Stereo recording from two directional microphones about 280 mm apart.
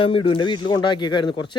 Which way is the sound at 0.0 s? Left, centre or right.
Centre.